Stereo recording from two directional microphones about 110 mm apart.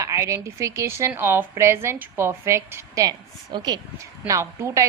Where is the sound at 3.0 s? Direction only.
40° right (ahead or behind).